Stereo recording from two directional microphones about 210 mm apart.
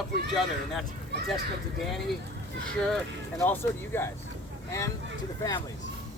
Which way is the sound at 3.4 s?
10° left (ahead or behind).